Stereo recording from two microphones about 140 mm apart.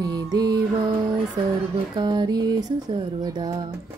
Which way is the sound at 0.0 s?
30° right (ahead or behind).